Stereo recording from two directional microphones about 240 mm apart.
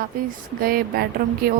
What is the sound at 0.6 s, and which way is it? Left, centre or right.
Speech, right.